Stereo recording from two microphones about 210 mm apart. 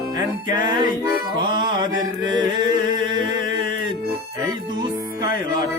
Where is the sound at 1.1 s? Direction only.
45° left (ahead or behind).